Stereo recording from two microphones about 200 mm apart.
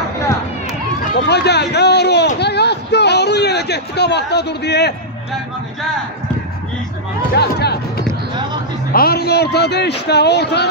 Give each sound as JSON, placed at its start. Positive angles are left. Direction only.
{"t": 1.3, "sound": "a sound", "side_deg": 55}
{"t": 7.3, "sound": "speech", "side_deg": 55}
{"t": 8.9, "sound": "a man's voice", "side_deg": 50}